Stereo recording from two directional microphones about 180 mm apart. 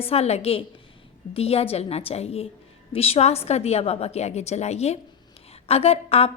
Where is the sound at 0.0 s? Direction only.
35° left (ahead or behind).